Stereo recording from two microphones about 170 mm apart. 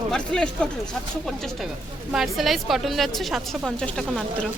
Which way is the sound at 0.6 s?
5° left (ahead or behind).